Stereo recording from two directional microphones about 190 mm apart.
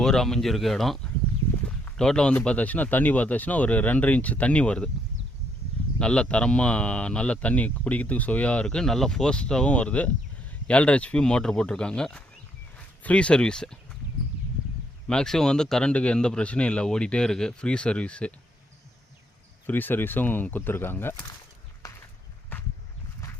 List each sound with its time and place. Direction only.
0.0 s a man's voice: 5° left (ahead or behind)
6.0 s a man's voice: 5° left (ahead or behind)
15.0 s speech: 5° left (ahead or behind)
19.6 s a man's voice: 10° left (ahead or behind)
21.8 s walk: 15° left (ahead or behind)
22.5 s a sound: 10° left (ahead or behind)